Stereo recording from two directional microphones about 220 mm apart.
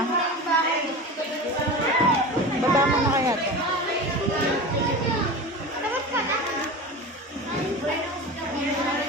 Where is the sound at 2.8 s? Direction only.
15° right (ahead or behind).